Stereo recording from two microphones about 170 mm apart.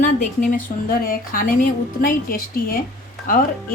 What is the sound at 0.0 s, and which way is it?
A woman's voice, 50° left (ahead or behind).